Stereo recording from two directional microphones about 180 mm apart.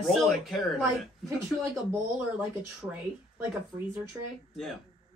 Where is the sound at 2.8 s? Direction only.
15° right (ahead or behind).